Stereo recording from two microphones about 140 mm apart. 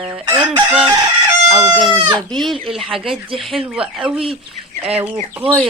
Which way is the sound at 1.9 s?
30° right (ahead or behind).